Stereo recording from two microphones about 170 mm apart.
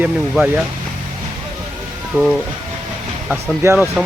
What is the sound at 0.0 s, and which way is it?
Speech, 10° right (ahead or behind).